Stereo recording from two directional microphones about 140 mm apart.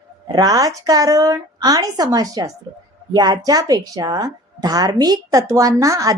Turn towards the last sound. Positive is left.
turn(degrees=-25)  # may be behind; listen again after turning